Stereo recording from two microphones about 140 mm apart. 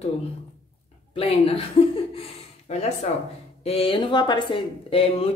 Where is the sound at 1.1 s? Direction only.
40° left (ahead or behind).